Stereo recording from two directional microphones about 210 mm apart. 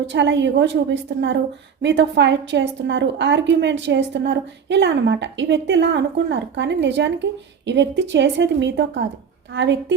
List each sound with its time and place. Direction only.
0.0 s a woman's voice: 55° right (ahead or behind)